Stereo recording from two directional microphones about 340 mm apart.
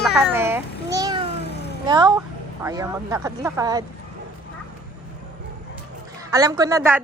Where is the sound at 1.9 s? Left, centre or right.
Centre.